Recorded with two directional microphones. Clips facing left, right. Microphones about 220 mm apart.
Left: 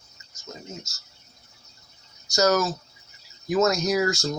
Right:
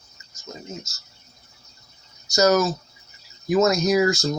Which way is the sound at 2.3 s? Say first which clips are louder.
Right 3 dB; 10° right (ahead or behind).